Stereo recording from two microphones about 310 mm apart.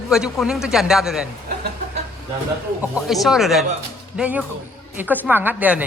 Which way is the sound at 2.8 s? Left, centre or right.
Centre.